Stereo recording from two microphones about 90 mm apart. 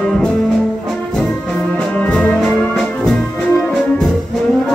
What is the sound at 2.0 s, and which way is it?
Music, 15° left (ahead or behind).